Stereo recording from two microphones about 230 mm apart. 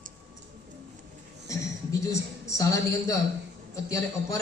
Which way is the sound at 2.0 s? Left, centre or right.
Centre.